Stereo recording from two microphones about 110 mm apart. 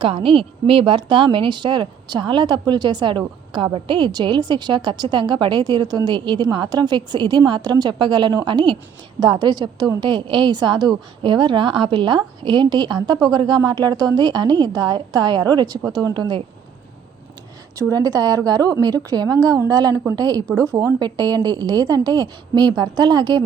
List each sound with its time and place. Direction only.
0.0 s a woman's voice: 55° right (ahead or behind)
17.7 s a woman's voice: 30° right (ahead or behind)